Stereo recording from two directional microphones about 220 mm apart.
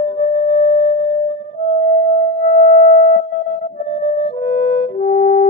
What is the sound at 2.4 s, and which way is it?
Music, 40° left (ahead or behind).